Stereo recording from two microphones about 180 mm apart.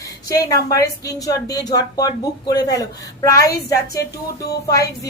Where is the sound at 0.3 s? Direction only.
20° left (ahead or behind).